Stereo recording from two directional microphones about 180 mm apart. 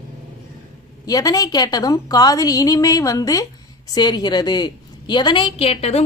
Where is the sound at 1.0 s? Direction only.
20° left (ahead or behind).